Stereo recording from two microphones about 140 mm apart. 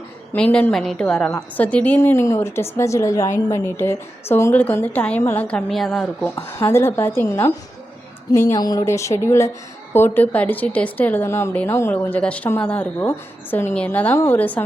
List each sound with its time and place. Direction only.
0.3 s a woman's voice: 10° left (ahead or behind)
6.3 s speech: 20° left (ahead or behind)